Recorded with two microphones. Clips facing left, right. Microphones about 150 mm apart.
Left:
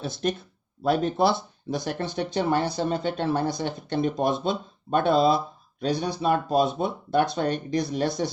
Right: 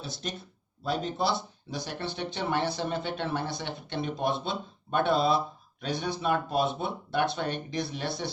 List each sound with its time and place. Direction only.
0.0 s speech: 55° left (ahead or behind)